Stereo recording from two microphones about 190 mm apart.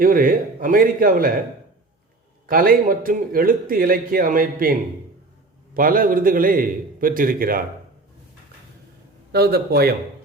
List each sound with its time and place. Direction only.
0.0 s a man's voice: 50° right (ahead or behind)
2.5 s a man's voice: 50° right (ahead or behind)
9.3 s speech: 55° right (ahead or behind)